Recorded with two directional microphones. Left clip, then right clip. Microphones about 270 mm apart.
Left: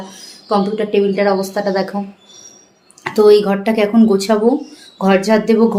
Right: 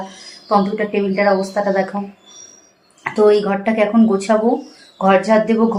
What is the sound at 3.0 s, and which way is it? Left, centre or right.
A woman's voice, centre.